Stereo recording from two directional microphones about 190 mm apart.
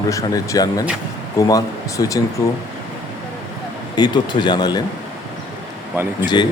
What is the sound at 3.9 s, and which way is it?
Speech, 25° left (ahead or behind).